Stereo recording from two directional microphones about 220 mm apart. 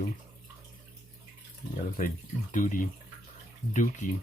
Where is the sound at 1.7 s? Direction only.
40° left (ahead or behind).